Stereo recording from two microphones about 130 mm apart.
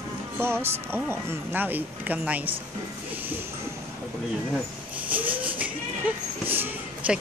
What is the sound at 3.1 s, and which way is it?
Music, 15° right (ahead or behind).